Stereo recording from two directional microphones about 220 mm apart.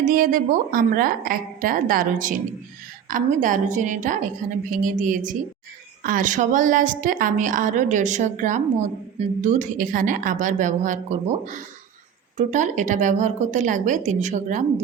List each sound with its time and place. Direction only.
0.1 s a woman's voice: 40° right (ahead or behind)